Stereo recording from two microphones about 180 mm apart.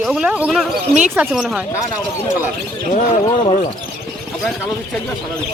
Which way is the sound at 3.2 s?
25° left (ahead or behind).